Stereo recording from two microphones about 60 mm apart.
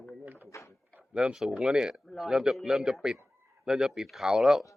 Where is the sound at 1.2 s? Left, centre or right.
Centre.